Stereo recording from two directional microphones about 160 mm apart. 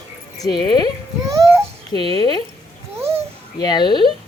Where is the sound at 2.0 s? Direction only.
35° right (ahead or behind).